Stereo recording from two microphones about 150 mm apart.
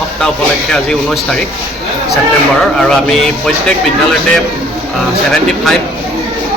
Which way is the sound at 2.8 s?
5° left (ahead or behind).